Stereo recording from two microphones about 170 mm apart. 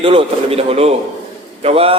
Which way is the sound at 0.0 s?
30° right (ahead or behind).